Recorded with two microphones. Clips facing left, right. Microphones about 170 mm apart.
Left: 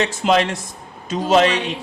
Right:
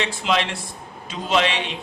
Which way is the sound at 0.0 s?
45° left (ahead or behind).